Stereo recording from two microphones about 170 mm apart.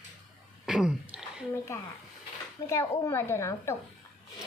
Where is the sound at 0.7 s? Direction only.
5° right (ahead or behind).